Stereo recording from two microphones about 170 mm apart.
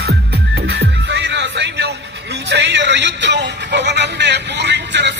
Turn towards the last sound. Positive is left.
turn(degrees=-90)